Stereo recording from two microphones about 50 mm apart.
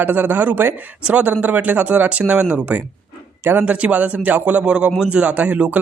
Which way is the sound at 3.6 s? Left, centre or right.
Right.